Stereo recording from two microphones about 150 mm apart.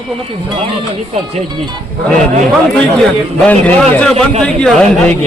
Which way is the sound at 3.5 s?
10° left (ahead or behind).